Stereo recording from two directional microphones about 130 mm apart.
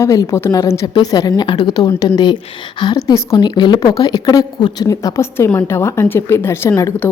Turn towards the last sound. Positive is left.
turn(degrees=20)  # may be behind; listen again after turning